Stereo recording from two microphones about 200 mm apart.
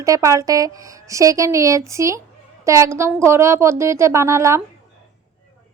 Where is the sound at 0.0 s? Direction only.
15° right (ahead or behind).